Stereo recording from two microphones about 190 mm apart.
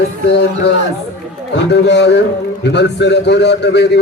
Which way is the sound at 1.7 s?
65° left (ahead or behind).